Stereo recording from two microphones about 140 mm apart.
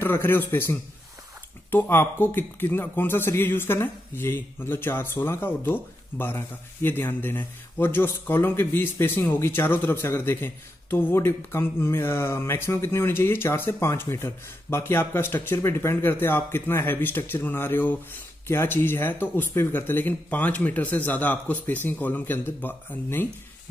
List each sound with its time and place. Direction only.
0.0 s speech: 15° left (ahead or behind)